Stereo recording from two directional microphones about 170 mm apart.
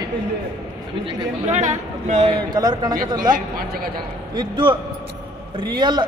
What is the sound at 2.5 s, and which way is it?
Speech, 25° right (ahead or behind).